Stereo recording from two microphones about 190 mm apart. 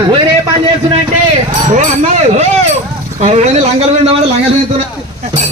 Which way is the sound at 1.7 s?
35° right (ahead or behind).